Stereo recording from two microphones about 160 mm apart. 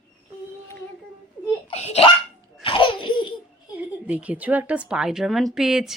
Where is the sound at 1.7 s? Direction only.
40° left (ahead or behind).